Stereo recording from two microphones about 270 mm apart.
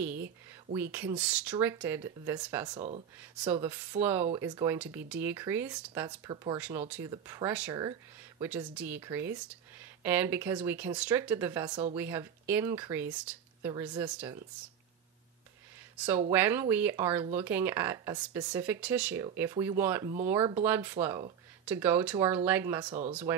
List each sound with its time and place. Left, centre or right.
0.9 s speech: centre
16.3 s speech: centre